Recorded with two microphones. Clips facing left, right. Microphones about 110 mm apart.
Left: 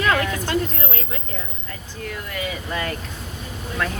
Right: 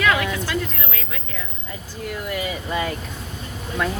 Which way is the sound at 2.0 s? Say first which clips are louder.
Right 3 dB; 5° right (ahead or behind).